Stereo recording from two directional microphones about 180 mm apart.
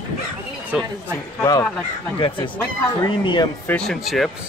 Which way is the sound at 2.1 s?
30° left (ahead or behind).